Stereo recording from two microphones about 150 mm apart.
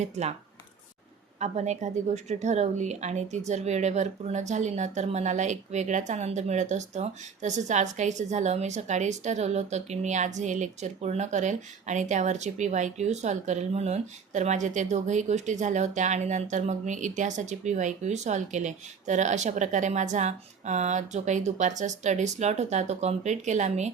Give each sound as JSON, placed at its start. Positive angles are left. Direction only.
{"t": 0.0, "sound": "speech", "side_deg": -50}
{"t": 1.4, "sound": "speech", "side_deg": -50}